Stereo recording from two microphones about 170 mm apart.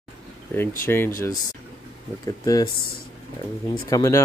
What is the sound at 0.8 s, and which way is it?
Speech, 15° left (ahead or behind).